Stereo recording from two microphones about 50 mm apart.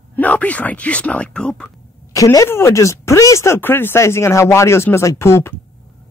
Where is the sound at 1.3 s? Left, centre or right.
Centre.